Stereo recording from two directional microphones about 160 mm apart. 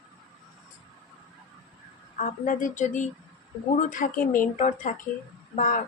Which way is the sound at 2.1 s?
55° left (ahead or behind).